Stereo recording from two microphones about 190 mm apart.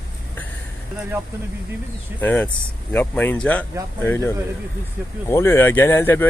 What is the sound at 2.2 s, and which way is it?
Speech, 10° left (ahead or behind).